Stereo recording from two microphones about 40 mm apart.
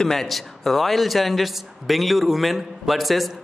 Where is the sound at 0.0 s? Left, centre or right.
Centre.